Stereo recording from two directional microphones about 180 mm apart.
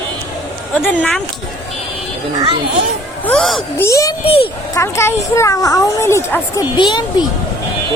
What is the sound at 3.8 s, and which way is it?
A woman's voice, 15° left (ahead or behind).